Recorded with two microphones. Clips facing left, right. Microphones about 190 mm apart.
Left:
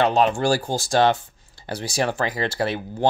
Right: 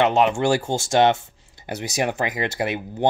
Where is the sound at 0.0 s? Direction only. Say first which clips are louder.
Right 1 dB; 20° right (ahead or behind).